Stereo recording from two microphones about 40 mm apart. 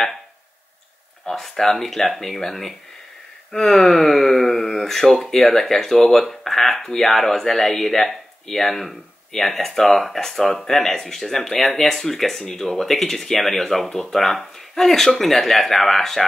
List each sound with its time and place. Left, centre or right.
1.3 s speech: centre
6.7 s speech: centre
7.0 s speech: centre